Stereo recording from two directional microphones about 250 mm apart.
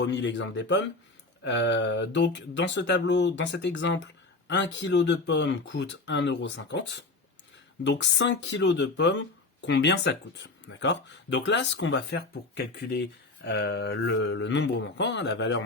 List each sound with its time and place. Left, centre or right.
0.0 s speech: left